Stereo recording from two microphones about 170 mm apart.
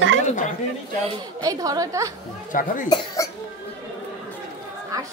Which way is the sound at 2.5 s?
50° left (ahead or behind).